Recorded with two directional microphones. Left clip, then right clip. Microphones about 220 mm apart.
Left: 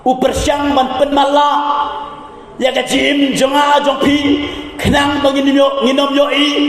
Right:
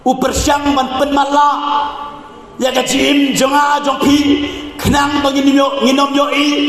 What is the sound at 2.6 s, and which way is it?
Speech, 15° right (ahead or behind).